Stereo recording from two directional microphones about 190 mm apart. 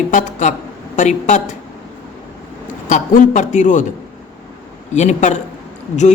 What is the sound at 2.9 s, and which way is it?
Speech, 40° left (ahead or behind).